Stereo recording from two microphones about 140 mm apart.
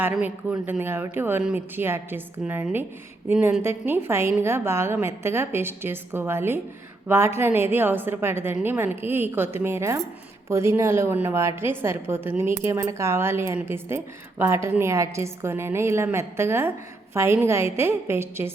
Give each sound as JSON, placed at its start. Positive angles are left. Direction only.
{"t": 0.0, "sound": "a woman's voice", "side_deg": -15}